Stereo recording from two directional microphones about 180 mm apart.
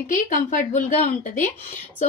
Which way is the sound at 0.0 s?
50° left (ahead or behind).